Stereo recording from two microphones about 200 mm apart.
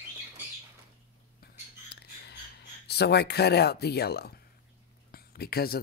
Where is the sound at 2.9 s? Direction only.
55° left (ahead or behind).